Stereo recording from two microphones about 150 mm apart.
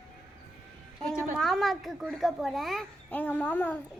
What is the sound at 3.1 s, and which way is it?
Speech, 10° left (ahead or behind).